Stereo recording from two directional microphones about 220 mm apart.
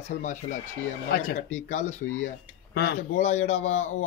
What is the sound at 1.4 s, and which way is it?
Speech, 30° left (ahead or behind).